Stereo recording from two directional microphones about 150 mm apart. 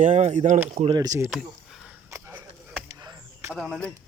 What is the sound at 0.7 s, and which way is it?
Speech, 40° right (ahead or behind).